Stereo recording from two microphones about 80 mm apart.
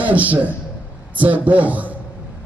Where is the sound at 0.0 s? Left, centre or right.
Centre.